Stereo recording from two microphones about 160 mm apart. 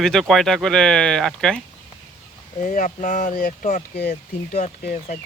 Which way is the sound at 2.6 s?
55° left (ahead or behind).